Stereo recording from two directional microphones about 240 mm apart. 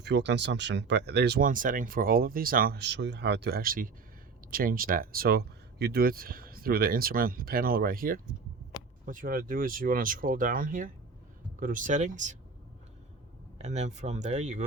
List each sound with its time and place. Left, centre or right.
0.0 s speech: right
8.7 s a sound: centre
9.0 s speech: right
13.6 s speech: right